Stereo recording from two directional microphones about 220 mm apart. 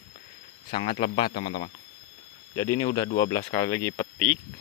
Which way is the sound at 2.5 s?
15° left (ahead or behind).